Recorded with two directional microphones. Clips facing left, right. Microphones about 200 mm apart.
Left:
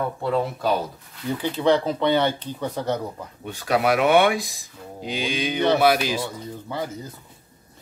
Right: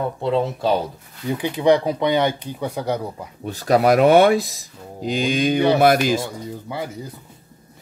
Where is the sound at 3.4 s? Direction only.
35° right (ahead or behind).